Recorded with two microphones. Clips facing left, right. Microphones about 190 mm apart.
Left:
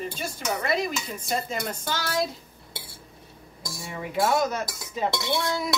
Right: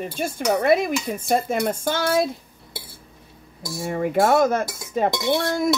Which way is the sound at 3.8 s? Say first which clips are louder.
Right 7 dB; 50° right (ahead or behind).